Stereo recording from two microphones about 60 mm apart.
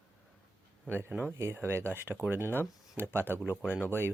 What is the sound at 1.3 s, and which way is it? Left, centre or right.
Speech, right.